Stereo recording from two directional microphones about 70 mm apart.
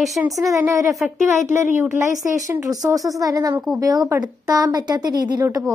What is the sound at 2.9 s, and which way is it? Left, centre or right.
Speech, right.